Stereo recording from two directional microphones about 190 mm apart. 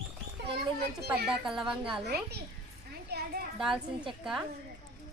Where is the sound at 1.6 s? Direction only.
25° right (ahead or behind).